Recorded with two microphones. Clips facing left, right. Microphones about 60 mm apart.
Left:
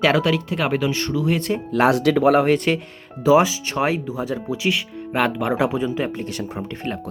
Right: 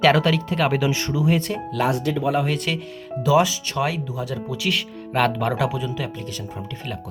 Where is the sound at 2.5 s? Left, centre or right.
Left.